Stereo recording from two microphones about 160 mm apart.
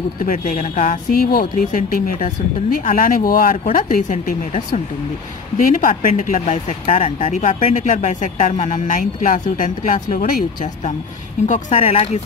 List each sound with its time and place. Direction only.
0.2 s a woman's voice: 55° left (ahead or behind)
4.5 s speech: 45° left (ahead or behind)
5.8 s speech: 55° left (ahead or behind); by 12.2 s 40° left (ahead or behind)